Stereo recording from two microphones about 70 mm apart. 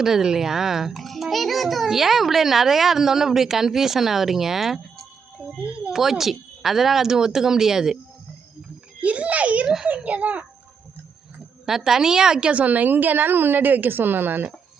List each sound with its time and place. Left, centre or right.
0.0 s a child's voice: centre
9.0 s a woman's voice: centre
11.6 s a woman's voice: centre; by 14.5 s right